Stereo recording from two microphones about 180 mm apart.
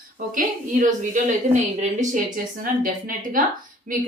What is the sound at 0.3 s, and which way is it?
A woman's voice, 50° right (ahead or behind).